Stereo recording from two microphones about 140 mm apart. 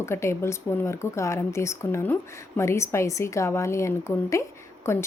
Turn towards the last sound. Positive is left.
turn(degrees=20)  # may be behind; listen again after turning